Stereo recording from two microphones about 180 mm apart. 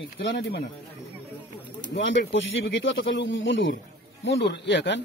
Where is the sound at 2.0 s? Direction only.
90° left.